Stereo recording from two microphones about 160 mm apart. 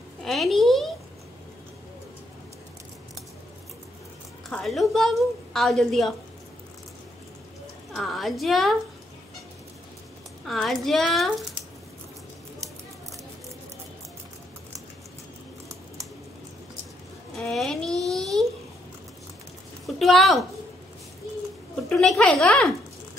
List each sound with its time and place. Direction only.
0.2 s a sound: centre (ahead or behind)
4.5 s a woman's voice: centre (ahead or behind)
7.9 s a woman's voice: centre (ahead or behind)
10.4 s a woman's voice: centre (ahead or behind)
17.3 s a sound: centre (ahead or behind)
20.0 s a woman's voice: centre (ahead or behind)
21.8 s a woman's voice: centre (ahead or behind)